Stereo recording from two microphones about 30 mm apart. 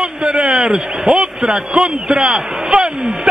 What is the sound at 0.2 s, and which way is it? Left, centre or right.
A man's voice, right.